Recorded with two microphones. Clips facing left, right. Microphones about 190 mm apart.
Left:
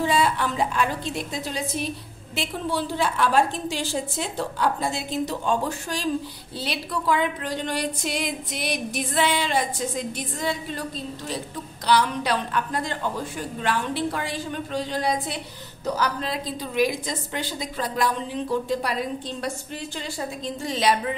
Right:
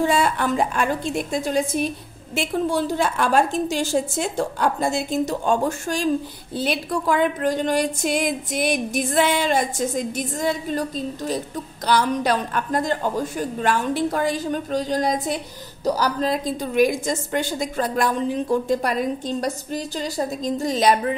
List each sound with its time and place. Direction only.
0.0 s speech: 50° right (ahead or behind)